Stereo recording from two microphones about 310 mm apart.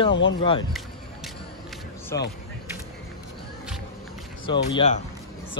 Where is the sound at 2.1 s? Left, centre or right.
Centre.